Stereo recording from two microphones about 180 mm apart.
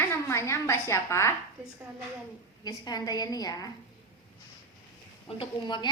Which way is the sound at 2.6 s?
20° left (ahead or behind).